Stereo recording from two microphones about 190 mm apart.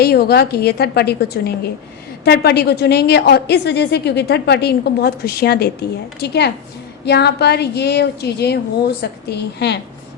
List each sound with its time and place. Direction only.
0.0 s a woman's voice: 55° left (ahead or behind)